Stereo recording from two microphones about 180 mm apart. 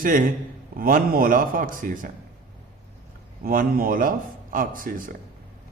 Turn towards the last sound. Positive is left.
turn(degrees=-50)  # may be behind; listen again after turning